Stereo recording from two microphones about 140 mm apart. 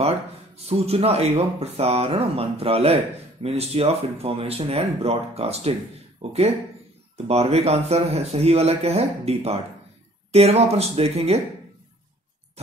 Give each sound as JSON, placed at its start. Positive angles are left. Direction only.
{"t": 0.7, "sound": "speech", "side_deg": -45}